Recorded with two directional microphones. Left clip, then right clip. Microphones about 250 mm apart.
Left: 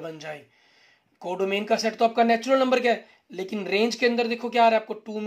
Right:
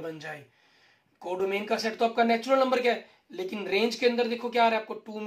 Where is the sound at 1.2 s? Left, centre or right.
Left.